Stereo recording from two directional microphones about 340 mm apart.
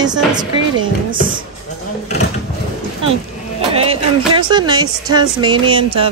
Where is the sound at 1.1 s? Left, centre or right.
Right.